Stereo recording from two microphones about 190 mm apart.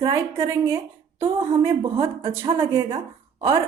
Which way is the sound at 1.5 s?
15° right (ahead or behind).